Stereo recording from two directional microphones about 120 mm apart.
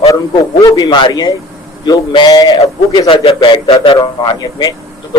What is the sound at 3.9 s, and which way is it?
Speech, 40° left (ahead or behind).